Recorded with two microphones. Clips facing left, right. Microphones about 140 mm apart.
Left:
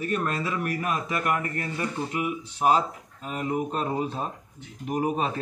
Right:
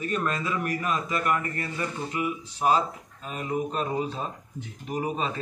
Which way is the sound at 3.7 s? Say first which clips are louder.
Left 1 dB; 40° left (ahead or behind).